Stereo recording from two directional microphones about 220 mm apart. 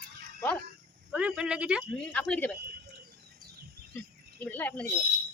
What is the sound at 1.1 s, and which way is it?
Speech, 5° right (ahead or behind).